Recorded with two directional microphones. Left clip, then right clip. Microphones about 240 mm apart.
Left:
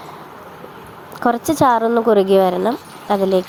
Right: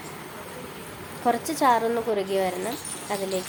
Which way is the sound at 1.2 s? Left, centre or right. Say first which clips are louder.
Left 7 dB; left.